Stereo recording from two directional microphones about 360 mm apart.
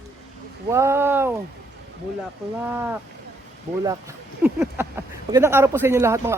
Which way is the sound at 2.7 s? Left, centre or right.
Centre.